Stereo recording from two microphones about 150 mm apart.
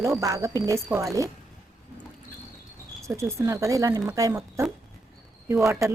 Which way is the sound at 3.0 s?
20° right (ahead or behind).